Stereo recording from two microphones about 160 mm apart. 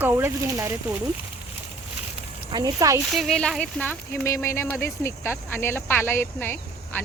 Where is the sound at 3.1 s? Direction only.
Centre (ahead or behind).